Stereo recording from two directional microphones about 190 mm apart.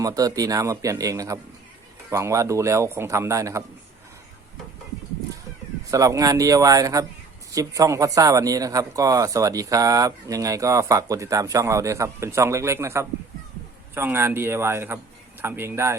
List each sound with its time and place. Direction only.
0.0 s speech: 20° right (ahead or behind)
5.9 s speech: 15° right (ahead or behind)